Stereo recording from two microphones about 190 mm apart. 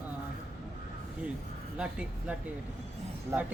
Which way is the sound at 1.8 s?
5° right (ahead or behind).